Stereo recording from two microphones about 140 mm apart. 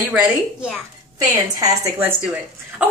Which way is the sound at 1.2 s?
25° right (ahead or behind).